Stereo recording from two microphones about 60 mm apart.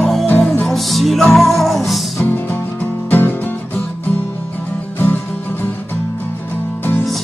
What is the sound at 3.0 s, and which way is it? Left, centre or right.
Music, left.